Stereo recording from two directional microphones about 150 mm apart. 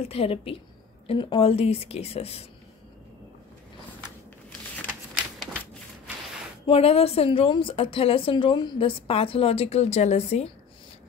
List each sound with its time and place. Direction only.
0.0 s a woman's voice: 40° left (ahead or behind)
6.6 s a woman's voice: 40° left (ahead or behind)